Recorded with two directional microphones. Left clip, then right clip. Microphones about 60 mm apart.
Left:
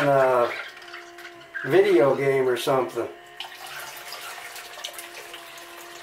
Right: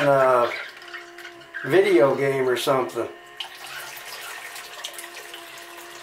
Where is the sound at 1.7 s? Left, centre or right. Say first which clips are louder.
Right 1 dB; right.